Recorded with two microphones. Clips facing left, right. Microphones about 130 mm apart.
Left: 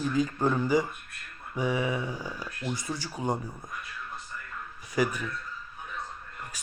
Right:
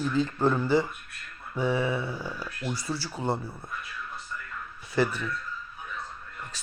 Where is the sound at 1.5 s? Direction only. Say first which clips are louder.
Right 2 dB; 15° left (ahead or behind).